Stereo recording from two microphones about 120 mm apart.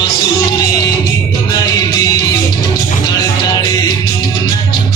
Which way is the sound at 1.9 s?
30° left (ahead or behind).